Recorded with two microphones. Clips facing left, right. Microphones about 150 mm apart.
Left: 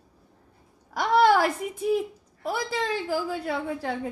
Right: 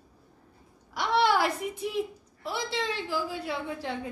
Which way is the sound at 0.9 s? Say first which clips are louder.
Left 5 dB; 45° left (ahead or behind).